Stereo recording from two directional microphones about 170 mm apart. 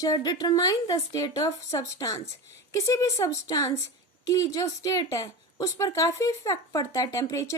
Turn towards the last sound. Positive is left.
turn(degrees=20)  # may be behind; listen again after turning